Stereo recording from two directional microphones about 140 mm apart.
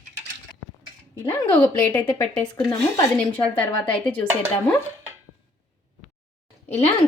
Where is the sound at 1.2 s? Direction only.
20° left (ahead or behind).